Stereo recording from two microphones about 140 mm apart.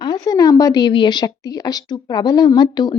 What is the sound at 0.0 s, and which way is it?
A woman's voice, 30° left (ahead or behind).